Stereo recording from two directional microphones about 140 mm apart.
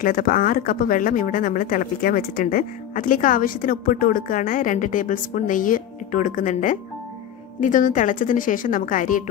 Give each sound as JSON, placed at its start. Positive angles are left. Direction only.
{"t": 0.0, "sound": "speech", "side_deg": 90}